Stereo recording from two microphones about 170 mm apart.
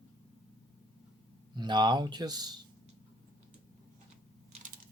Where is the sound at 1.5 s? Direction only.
25° right (ahead or behind).